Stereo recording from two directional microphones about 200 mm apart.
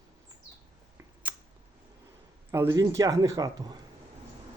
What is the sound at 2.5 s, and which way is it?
Speech, 15° right (ahead or behind).